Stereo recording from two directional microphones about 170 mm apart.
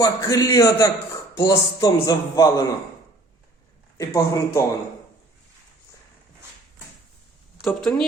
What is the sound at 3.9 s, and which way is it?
Speech, 15° left (ahead or behind).